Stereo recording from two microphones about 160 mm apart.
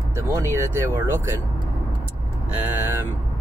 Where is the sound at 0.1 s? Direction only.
15° right (ahead or behind).